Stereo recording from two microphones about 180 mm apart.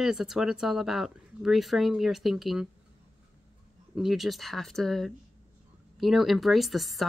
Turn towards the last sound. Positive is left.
turn(degrees=0)  # may be behind; listen again after turning